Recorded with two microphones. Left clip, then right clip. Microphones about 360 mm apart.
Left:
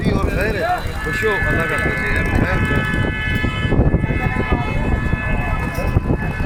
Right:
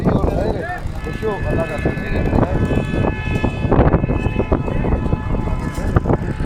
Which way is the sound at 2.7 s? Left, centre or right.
Right.